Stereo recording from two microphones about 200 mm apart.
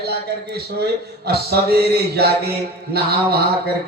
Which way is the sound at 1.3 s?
50° right (ahead or behind).